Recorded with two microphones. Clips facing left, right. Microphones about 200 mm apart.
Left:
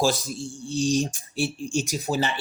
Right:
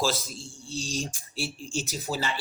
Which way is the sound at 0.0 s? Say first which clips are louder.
Left 5 dB; 15° left (ahead or behind).